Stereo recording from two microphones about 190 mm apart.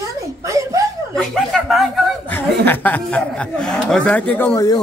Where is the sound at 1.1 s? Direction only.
Centre (ahead or behind).